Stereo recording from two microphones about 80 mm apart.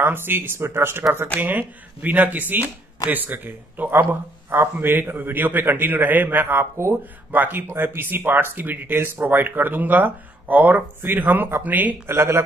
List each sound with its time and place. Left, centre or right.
0.0 s speech: right
12.1 s speech: right